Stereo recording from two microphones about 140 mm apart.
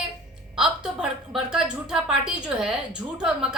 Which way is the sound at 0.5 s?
5° right (ahead or behind).